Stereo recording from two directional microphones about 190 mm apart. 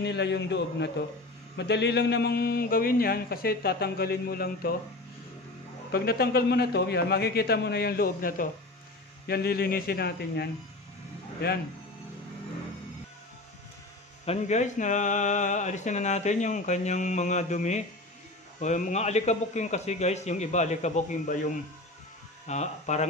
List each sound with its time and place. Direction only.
0.0 s a man's voice: 65° left (ahead or behind)
5.9 s a man's voice: 55° left (ahead or behind)
14.2 s speech: 35° left (ahead or behind)
22.5 s speech: 35° left (ahead or behind)